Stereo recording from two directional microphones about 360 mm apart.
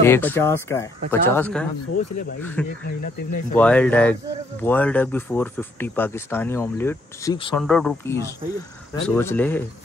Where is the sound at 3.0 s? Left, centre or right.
Left.